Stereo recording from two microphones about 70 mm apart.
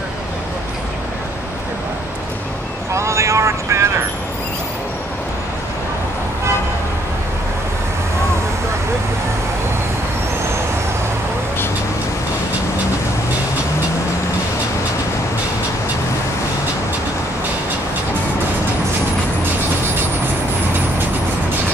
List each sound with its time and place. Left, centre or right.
2.9 s vehicle: right